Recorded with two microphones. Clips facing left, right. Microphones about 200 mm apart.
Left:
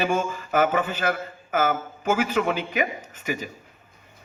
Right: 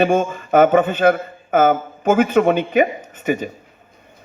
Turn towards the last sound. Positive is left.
turn(degrees=-55)  # may be behind; listen again after turning